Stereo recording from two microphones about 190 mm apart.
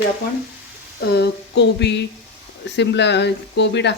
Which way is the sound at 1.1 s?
60° left (ahead or behind).